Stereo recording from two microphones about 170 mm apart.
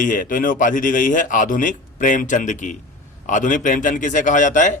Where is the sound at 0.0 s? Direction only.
50° left (ahead or behind).